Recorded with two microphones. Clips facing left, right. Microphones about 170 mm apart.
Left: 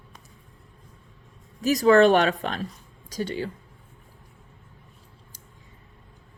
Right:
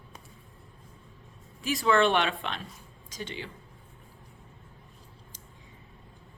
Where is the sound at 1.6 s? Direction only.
40° left (ahead or behind).